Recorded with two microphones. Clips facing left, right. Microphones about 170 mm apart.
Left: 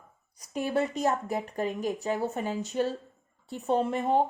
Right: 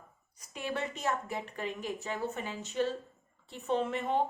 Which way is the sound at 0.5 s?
40° left (ahead or behind).